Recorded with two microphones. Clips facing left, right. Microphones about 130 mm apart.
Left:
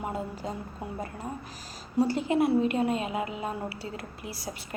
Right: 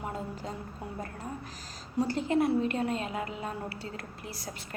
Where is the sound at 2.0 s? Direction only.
10° left (ahead or behind).